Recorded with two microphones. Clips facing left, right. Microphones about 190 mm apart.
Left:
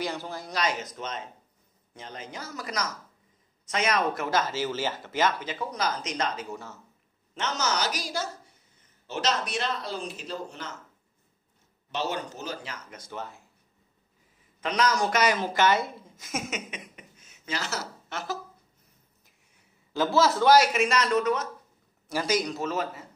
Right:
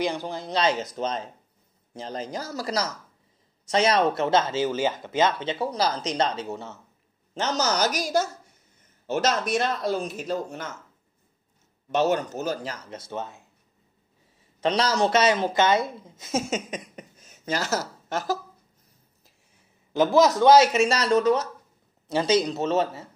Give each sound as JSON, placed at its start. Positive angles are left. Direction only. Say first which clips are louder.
{"t": 0.0, "sound": "a woman's voice", "louder": "right 5 dB", "side_deg": -15}
{"t": 7.3, "sound": "speech", "louder": "right 4 dB", "side_deg": -40}
{"t": 11.9, "sound": "speech", "louder": "right 8 dB", "side_deg": -45}
{"t": 12.9, "sound": "speech", "louder": "right 3 dB", "side_deg": -25}
{"t": 14.6, "sound": "a woman's voice", "louder": "right 3 dB", "side_deg": -30}
{"t": 19.9, "sound": "speech", "louder": "right 5 dB", "side_deg": -20}